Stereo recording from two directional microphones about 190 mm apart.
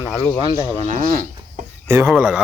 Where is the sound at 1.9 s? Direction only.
15° right (ahead or behind).